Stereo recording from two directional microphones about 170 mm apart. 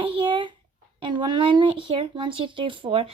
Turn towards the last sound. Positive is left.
turn(degrees=-30)  # may be behind; listen again after turning